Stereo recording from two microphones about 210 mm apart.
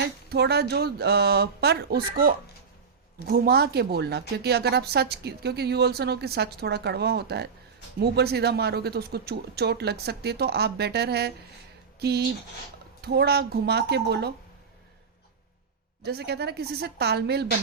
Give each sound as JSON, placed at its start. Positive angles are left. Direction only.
{"t": 0.3, "sound": "speech", "side_deg": -50}
{"t": 16.0, "sound": "speech", "side_deg": -50}